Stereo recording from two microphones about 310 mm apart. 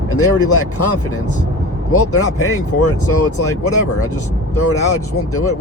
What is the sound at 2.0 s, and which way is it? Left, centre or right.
Speech, left.